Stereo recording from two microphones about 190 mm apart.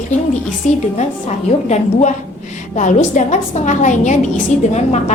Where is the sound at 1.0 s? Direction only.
35° left (ahead or behind).